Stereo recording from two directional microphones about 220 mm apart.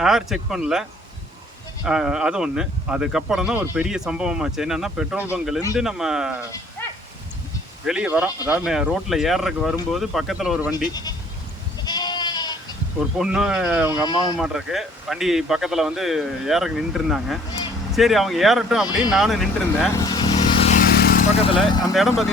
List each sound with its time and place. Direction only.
0.0 s speech: centre (ahead or behind)
7.9 s speech: 5° right (ahead or behind)
11.8 s goat: 20° left (ahead or behind)
13.0 s speech: 5° right (ahead or behind)
19.9 s vehicle: 15° left (ahead or behind)
20.9 s speech: 45° left (ahead or behind); by 21.9 s 20° left (ahead or behind)
21.9 s speech: centre (ahead or behind)